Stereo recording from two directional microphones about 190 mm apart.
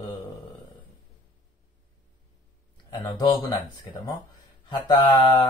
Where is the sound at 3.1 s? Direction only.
25° left (ahead or behind).